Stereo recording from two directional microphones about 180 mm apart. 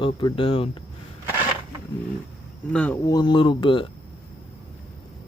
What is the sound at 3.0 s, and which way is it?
Speech, 25° left (ahead or behind).